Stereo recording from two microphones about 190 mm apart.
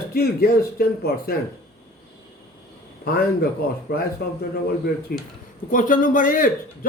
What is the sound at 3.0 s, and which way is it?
A man's voice, 50° left (ahead or behind).